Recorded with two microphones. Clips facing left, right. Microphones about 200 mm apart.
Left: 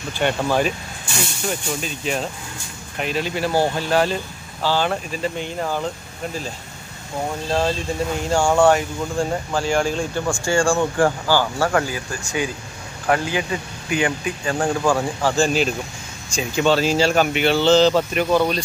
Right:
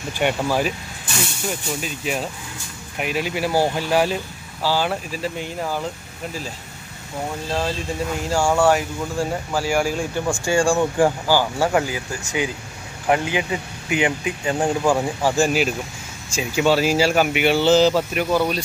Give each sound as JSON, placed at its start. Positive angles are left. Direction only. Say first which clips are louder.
{"t": 0.2, "sound": "speech", "louder": "left 1 dB", "side_deg": -10}
{"t": 1.8, "sound": "speech", "louder": "left 1 dB", "side_deg": -5}
{"t": 8.3, "sound": "speech", "louder": "left 2 dB", "side_deg": -5}